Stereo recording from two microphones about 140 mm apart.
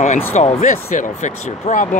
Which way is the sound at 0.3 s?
55° left (ahead or behind).